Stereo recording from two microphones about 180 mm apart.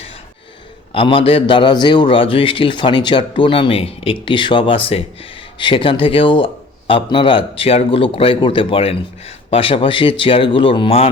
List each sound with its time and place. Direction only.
0.9 s a man's voice: 30° left (ahead or behind)